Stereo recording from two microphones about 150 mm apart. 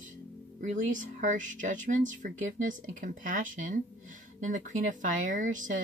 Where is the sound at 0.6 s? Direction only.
60° right (ahead or behind).